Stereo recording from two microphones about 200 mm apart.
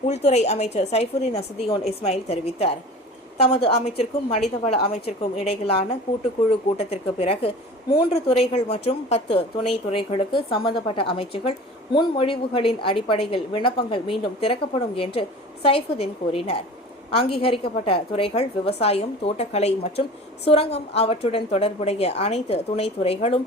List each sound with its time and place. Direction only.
0.1 s a woman's voice: 35° left (ahead or behind)
6.7 s a woman's voice: 30° left (ahead or behind)